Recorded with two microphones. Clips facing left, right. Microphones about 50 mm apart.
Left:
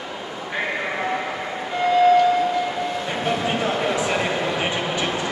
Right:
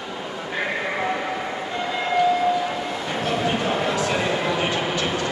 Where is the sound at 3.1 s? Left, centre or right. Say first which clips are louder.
Right 2 dB; centre.